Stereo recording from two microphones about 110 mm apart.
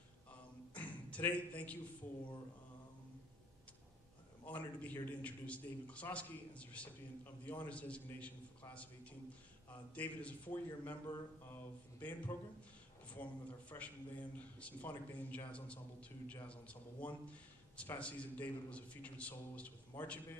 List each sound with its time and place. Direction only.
0.3 s a sound: 10° left (ahead or behind)
4.5 s a man's voice: 15° left (ahead or behind)
9.7 s a man's voice: 15° left (ahead or behind)